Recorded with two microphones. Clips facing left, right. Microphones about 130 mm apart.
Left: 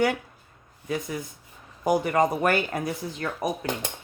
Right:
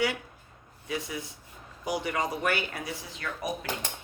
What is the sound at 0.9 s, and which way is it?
Speech, 50° left (ahead or behind).